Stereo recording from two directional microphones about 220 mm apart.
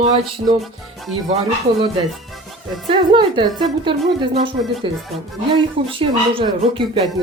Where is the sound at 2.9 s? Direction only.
20° right (ahead or behind).